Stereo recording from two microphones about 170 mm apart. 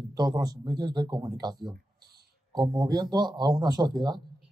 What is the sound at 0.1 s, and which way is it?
A man's voice, 25° right (ahead or behind).